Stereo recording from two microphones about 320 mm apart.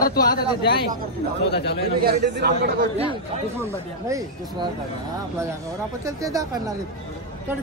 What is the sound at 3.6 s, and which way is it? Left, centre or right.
Speech, centre.